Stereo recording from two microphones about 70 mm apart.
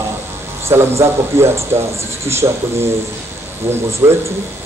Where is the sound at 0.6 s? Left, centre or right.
Right.